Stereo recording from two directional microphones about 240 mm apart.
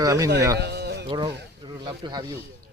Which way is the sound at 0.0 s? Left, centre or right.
Centre.